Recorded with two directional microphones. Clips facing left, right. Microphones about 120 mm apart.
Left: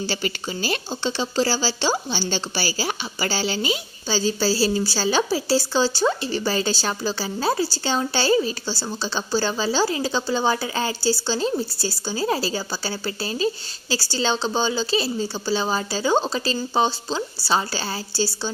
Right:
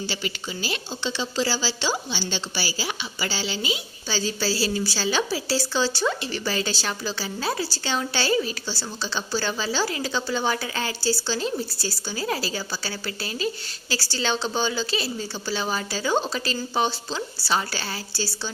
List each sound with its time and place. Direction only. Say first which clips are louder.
0.1 s speech: left 4 dB; 45° left (ahead or behind)